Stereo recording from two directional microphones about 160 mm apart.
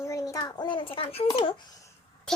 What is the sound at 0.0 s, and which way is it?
A child's voice, 20° left (ahead or behind).